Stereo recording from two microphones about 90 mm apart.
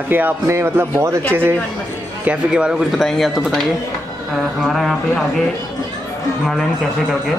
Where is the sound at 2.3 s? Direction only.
10° right (ahead or behind).